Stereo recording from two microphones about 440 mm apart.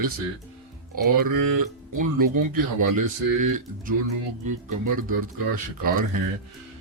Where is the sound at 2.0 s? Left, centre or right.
Right.